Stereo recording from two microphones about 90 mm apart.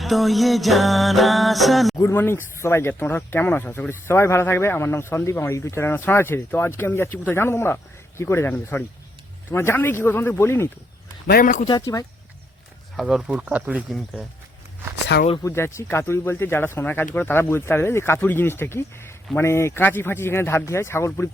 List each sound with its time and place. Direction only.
0.0 s music: centre (ahead or behind)
2.0 s speech: 30° left (ahead or behind)
11.7 s speech: 40° left (ahead or behind)
13.0 s music: 5° right (ahead or behind)
13.3 s speech: 15° right (ahead or behind)
15.4 s speech: 30° left (ahead or behind)